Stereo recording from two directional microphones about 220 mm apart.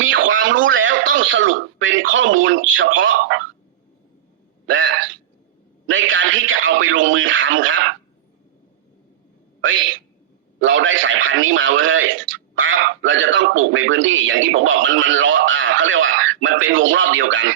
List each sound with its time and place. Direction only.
0.0 s speech: 60° right (ahead or behind)
4.7 s a man's voice: 60° right (ahead or behind)
9.6 s a man's voice: 60° right (ahead or behind)